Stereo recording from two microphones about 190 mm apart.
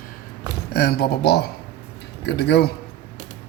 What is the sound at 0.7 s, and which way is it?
Speech, 55° left (ahead or behind).